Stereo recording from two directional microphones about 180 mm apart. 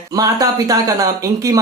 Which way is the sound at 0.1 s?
20° right (ahead or behind).